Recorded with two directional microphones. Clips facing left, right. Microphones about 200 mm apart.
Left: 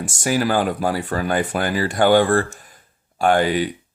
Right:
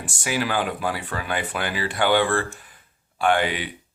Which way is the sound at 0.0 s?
45° left (ahead or behind).